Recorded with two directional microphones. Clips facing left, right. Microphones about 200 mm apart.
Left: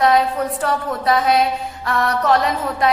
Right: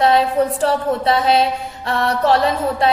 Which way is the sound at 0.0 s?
30° right (ahead or behind).